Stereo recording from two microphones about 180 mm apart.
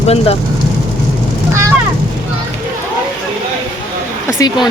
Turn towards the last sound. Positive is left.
turn(degrees=20)  # may be behind; listen again after turning